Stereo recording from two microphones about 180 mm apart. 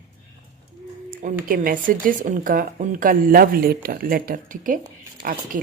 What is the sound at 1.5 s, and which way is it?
A woman's voice, 50° right (ahead or behind).